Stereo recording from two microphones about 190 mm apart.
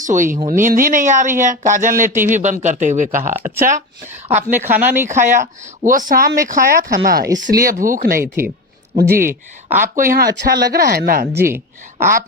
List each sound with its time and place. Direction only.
0.0 s speech: 45° right (ahead or behind)
4.5 s speech: 10° right (ahead or behind)
5.0 s speech: 40° right (ahead or behind)
8.2 s speech: 15° right (ahead or behind)
9.0 s speech: 50° right (ahead or behind)
9.6 s speech: 10° right (ahead or behind)
9.9 s speech: 45° right (ahead or behind)
11.3 s speech: 15° right (ahead or behind)